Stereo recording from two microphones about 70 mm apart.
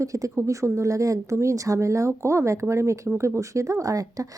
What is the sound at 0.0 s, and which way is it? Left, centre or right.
A woman's voice, right.